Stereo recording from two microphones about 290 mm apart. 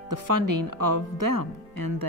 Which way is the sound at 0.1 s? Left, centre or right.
Right.